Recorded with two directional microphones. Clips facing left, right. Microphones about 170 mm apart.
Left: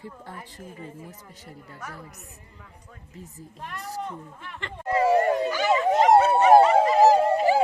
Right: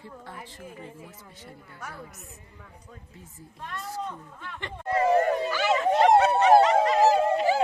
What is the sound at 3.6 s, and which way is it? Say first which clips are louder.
Speech: even; 15° left (ahead or behind).